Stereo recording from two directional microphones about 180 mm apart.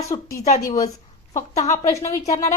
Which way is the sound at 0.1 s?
25° left (ahead or behind).